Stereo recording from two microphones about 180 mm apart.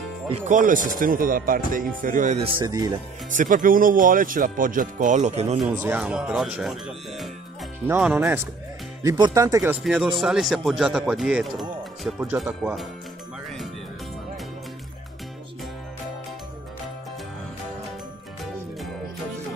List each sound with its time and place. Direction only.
0.3 s speech: 45° right (ahead or behind)
2.6 s speech: 20° right (ahead or behind)
3.3 s speech: 45° right (ahead or behind)
5.9 s speech: 5° right (ahead or behind)
9.0 s speech: 20° right (ahead or behind); by 12.3 s 5° right (ahead or behind)